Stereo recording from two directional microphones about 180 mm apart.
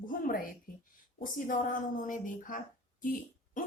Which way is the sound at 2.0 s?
50° left (ahead or behind).